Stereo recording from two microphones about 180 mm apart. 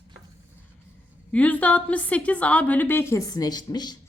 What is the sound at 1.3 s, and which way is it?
A woman's voice, 10° left (ahead or behind).